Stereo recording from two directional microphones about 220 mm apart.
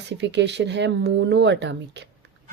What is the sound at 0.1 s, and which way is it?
Speech, 50° right (ahead or behind).